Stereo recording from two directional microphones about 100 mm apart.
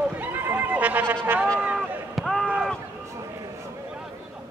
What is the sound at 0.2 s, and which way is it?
Neigh, 20° right (ahead or behind).